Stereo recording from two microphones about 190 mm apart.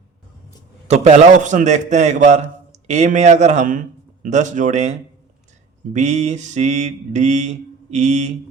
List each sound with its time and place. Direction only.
0.9 s mantra: 35° right (ahead or behind)